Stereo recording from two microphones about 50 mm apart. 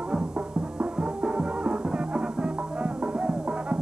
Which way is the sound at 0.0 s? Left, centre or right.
Centre.